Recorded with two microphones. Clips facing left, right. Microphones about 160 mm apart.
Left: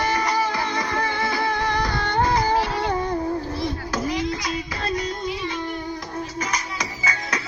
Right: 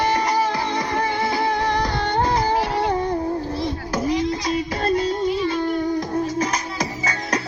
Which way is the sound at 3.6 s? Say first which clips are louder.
Right 2 dB; 25° right (ahead or behind).